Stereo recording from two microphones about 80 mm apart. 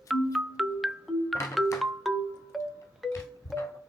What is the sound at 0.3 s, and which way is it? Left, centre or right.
Music, centre.